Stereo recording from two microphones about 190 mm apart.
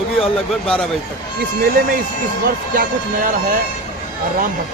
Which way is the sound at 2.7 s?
50° right (ahead or behind).